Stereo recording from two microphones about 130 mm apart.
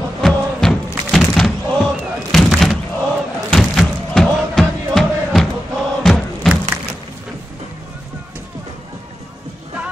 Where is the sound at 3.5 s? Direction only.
5° left (ahead or behind).